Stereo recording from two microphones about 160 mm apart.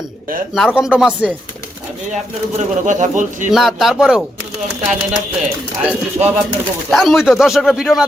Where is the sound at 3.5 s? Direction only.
Centre (ahead or behind).